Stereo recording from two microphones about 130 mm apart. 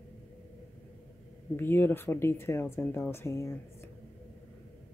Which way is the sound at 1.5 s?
15° left (ahead or behind).